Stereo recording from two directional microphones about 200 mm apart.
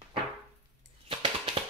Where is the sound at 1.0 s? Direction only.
25° right (ahead or behind).